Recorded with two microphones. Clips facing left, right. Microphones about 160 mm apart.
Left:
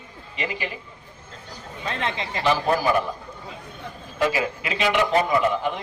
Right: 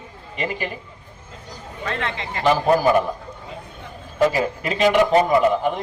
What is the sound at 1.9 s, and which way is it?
Speech, 20° left (ahead or behind).